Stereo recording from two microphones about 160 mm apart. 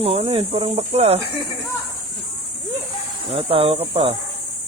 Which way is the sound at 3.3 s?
35° right (ahead or behind).